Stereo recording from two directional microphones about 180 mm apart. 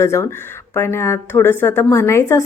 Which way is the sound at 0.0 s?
15° left (ahead or behind).